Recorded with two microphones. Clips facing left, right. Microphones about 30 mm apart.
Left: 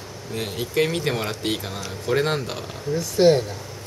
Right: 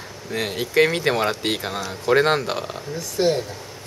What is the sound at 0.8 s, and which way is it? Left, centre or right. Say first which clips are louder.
Speech: right 5 dB; right.